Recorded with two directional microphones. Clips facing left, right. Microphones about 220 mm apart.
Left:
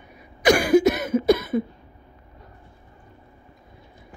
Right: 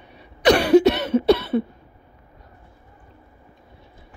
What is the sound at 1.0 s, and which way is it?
Cough, 70° right (ahead or behind).